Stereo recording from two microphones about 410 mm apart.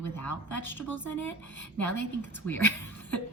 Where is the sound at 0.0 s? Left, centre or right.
Left.